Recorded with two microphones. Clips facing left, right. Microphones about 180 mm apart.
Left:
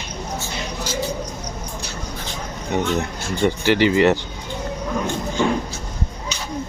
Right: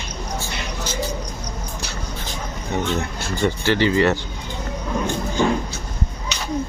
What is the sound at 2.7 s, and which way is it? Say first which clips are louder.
Speech: left 2 dB; 15° left (ahead or behind).